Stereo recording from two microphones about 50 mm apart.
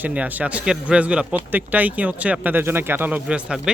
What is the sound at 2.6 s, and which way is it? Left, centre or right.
Speech, right.